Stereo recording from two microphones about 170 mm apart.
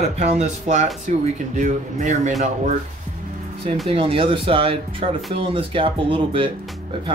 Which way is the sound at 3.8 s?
35° right (ahead or behind).